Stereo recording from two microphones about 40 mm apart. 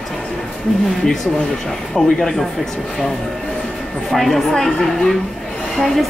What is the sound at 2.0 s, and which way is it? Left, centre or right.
Speech, centre.